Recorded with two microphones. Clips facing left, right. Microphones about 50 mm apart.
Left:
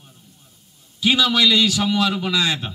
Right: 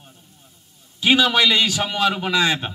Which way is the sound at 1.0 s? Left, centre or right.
Right.